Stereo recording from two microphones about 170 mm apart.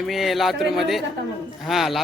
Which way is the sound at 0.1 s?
Centre (ahead or behind).